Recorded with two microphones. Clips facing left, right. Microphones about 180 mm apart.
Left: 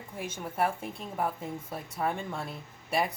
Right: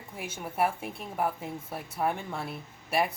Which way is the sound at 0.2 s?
10° right (ahead or behind).